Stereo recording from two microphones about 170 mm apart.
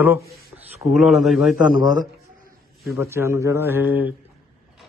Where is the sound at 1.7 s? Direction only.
50° right (ahead or behind).